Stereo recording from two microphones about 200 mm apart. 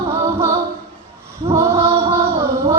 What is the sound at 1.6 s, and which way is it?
Music, 15° right (ahead or behind).